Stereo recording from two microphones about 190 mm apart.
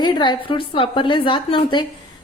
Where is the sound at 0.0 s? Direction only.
25° left (ahead or behind).